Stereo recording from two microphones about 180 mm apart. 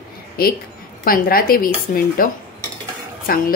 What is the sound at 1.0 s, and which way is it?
Speech, 55° left (ahead or behind).